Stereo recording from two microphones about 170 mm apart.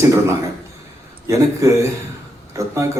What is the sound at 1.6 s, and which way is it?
A man's voice, 20° right (ahead or behind).